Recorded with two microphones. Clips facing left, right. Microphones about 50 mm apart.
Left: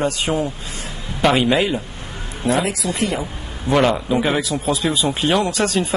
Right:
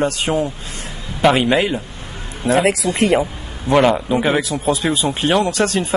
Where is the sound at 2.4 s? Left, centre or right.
Right.